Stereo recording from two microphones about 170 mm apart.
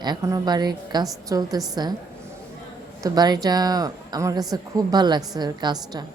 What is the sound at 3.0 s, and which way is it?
A woman's voice, 25° right (ahead or behind).